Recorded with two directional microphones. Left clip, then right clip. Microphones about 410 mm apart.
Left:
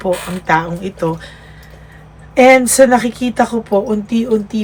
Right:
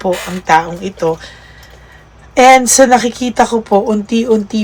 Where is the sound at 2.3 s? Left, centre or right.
Centre.